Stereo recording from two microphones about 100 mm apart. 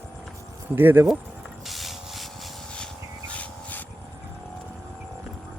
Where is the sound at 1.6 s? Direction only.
Centre (ahead or behind).